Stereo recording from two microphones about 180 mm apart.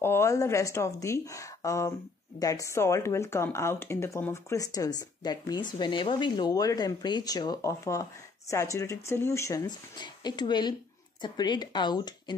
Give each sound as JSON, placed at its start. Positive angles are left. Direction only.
{"t": 0.0, "sound": "a woman's voice", "side_deg": 15}